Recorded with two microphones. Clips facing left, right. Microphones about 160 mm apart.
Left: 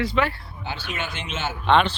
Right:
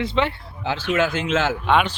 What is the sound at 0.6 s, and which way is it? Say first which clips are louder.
Speech: right 10 dB; 90° right.